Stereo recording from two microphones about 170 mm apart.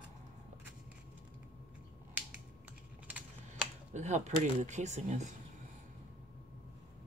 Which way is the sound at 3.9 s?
45° right (ahead or behind).